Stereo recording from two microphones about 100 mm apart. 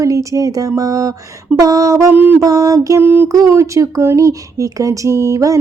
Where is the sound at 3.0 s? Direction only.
20° right (ahead or behind).